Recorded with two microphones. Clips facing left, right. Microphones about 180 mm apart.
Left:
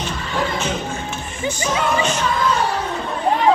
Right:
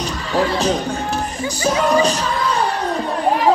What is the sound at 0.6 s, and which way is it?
Speech, 35° right (ahead or behind).